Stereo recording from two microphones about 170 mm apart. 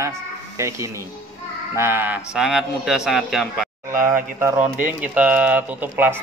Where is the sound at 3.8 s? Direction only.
15° right (ahead or behind).